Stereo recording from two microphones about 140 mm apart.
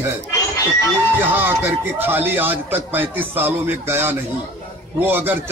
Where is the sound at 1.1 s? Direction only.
15° right (ahead or behind).